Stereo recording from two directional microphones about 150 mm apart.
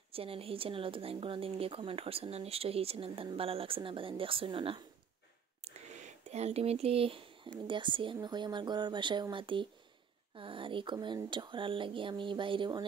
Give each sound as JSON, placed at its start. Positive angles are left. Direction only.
{"t": 0.1, "sound": "speech", "side_deg": -40}
{"t": 5.6, "sound": "speech", "side_deg": -50}